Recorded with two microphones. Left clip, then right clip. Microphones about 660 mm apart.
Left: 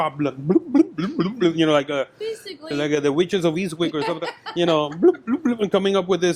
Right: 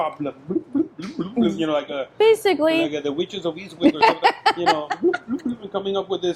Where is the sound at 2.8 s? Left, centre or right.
Left.